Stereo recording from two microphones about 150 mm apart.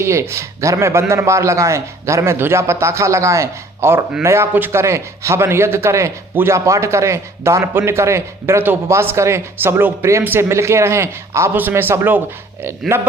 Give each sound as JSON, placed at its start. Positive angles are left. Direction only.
{"t": 0.0, "sound": "a man's voice", "side_deg": -20}